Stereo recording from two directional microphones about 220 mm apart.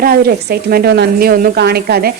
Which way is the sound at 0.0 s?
45° right (ahead or behind).